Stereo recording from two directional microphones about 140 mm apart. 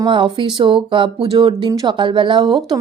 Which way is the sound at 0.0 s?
35° right (ahead or behind).